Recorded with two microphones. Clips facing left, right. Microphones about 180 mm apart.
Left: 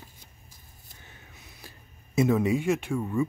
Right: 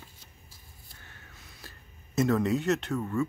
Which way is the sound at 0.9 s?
15° left (ahead or behind).